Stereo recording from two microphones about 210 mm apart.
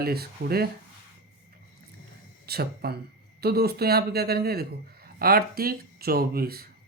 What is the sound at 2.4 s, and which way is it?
Speech, 50° right (ahead or behind).